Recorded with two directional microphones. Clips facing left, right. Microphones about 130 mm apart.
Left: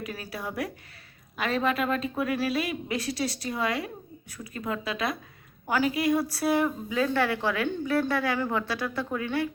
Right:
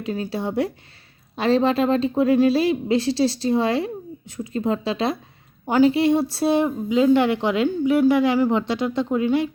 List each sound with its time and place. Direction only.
0.0 s a woman's voice: 25° right (ahead or behind)